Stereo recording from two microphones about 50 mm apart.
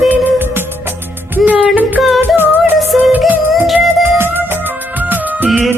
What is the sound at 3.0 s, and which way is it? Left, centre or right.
Music, right.